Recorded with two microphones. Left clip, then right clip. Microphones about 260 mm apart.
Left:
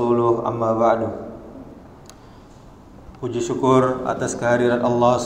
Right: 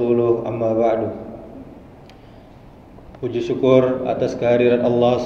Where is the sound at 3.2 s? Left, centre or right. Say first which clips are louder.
Right 2 dB; centre.